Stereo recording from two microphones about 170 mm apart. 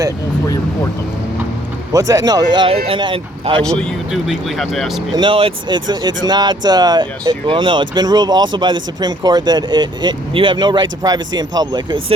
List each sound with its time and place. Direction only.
1.9 s speech: 20° right (ahead or behind)
3.8 s speech: centre (ahead or behind)
5.1 s speech: 30° right (ahead or behind)